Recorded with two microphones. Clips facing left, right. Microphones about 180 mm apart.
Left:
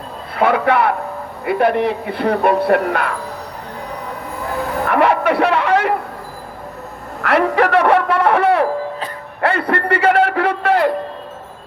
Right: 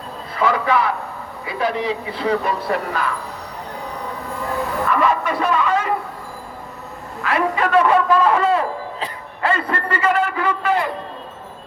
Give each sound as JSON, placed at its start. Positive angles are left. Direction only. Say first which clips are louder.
{"t": 0.3, "sound": "speech", "louder": "left 4 dB", "side_deg": 60}
{"t": 4.9, "sound": "a man's voice", "louder": "left 5 dB", "side_deg": 65}
{"t": 7.2, "sound": "a man's voice", "louder": "left 5 dB", "side_deg": 70}